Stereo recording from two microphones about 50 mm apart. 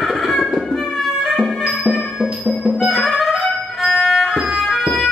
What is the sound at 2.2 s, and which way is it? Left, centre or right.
Music, centre.